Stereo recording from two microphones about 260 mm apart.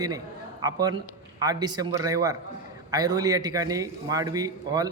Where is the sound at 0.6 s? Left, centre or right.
Centre.